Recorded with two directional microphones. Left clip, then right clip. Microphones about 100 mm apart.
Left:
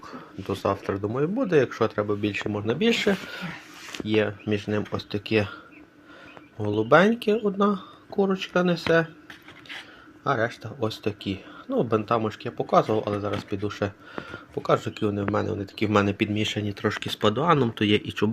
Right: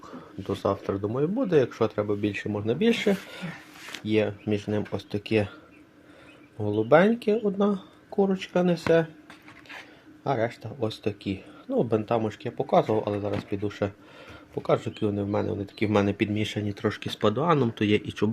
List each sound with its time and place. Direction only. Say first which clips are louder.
0.0 s speech: left 2 dB; 25° right (ahead or behind)
6.6 s speech: left 1 dB; 20° right (ahead or behind)
8.1 s speech: left 1 dB; 25° right (ahead or behind)
10.2 s speech: left 2 dB; 20° right (ahead or behind)